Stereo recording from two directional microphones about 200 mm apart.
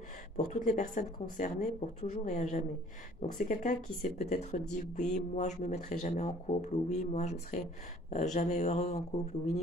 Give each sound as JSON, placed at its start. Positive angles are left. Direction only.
{"t": 0.4, "sound": "speech", "side_deg": 40}